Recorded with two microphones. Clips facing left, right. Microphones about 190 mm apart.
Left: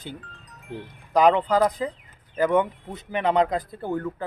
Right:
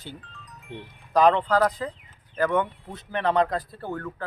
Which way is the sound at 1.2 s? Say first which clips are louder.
Left 1 dB; 15° left (ahead or behind).